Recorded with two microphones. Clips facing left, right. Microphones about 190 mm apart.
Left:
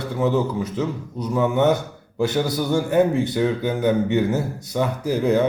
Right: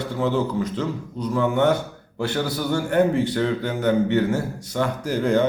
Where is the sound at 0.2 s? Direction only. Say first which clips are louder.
Left 2 dB; 10° left (ahead or behind).